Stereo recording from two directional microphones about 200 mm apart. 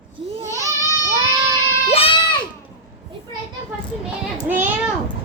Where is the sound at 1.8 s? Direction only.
30° left (ahead or behind).